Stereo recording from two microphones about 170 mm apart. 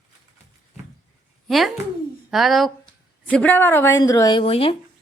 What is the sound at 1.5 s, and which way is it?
Speech, centre (ahead or behind).